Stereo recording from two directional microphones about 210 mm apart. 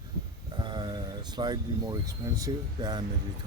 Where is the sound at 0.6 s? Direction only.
20° right (ahead or behind).